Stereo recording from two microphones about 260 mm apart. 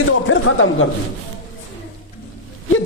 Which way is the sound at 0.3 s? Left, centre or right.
Left.